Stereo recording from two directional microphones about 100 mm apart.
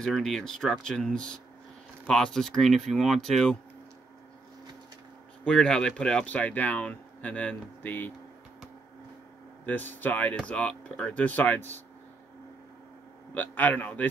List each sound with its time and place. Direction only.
0.0 s speech: 5° left (ahead or behind)
5.4 s speech: 10° left (ahead or behind)
9.7 s speech: 20° left (ahead or behind)
13.3 s speech: 15° left (ahead or behind)